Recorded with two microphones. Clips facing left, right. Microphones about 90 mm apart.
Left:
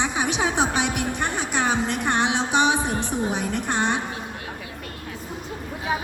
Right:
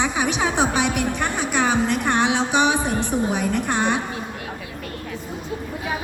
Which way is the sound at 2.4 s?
15° right (ahead or behind).